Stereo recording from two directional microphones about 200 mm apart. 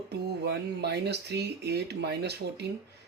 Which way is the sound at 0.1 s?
55° right (ahead or behind).